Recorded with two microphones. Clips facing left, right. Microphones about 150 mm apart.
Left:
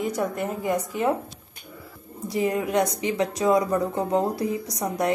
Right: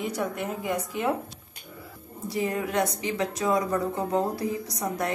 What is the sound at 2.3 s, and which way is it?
A woman's voice, 15° left (ahead or behind).